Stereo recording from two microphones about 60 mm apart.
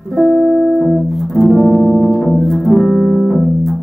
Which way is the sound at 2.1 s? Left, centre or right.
Centre.